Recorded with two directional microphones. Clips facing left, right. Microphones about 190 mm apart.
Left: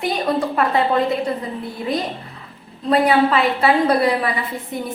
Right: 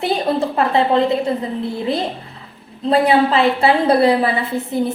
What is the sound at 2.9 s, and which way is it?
A woman's voice, 30° right (ahead or behind).